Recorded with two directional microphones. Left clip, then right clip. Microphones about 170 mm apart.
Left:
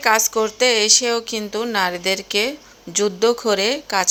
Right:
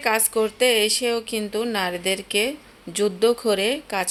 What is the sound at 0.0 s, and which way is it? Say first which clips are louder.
Speech: left 4 dB; 5° left (ahead or behind).